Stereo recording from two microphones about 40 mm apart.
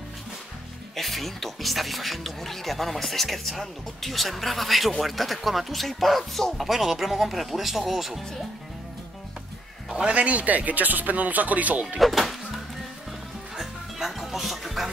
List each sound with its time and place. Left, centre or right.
0.9 s speech: centre
10.1 s speech: right
12.0 s music: centre